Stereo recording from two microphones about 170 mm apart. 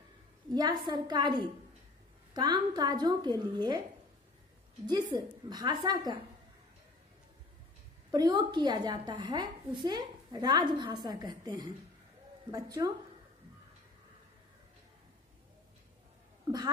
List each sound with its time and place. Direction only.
0.6 s a woman's voice: 25° right (ahead or behind)
5.1 s a woman's voice: 25° right (ahead or behind)
8.1 s a woman's voice: 25° right (ahead or behind)
16.5 s cat: 20° right (ahead or behind)